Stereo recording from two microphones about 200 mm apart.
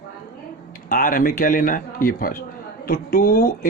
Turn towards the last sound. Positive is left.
turn(degrees=45)  # may be behind; listen again after turning